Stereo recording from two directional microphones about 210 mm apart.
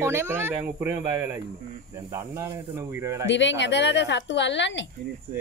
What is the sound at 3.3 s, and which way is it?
A woman's voice, 60° left (ahead or behind).